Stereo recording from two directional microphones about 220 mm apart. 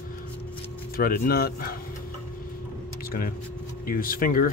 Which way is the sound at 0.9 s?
40° left (ahead or behind).